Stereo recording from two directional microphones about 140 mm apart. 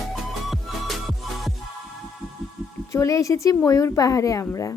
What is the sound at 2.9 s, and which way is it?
A woman's voice, 25° left (ahead or behind).